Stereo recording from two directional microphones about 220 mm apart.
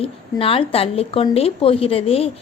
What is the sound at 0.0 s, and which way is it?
A woman's voice, 25° left (ahead or behind).